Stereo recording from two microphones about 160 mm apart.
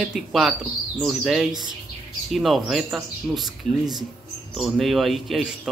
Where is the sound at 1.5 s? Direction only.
25° right (ahead or behind).